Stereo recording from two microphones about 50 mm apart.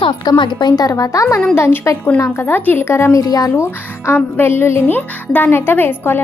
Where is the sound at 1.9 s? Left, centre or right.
Left.